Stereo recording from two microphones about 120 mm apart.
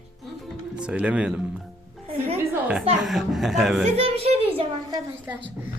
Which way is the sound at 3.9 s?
55° right (ahead or behind).